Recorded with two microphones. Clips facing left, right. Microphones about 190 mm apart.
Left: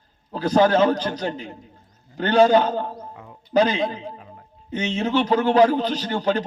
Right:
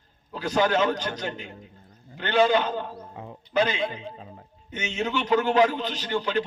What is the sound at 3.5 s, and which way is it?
A man's voice, 35° left (ahead or behind).